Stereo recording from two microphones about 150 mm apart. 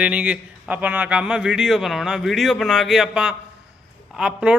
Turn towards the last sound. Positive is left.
turn(degrees=-5)  # may be behind; listen again after turning